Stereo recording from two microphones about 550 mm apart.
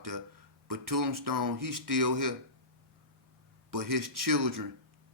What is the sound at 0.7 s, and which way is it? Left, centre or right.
Speech, right.